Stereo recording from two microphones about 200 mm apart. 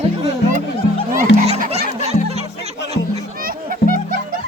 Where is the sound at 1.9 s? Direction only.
30° right (ahead or behind).